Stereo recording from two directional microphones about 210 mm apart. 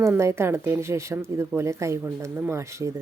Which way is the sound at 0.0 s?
15° right (ahead or behind).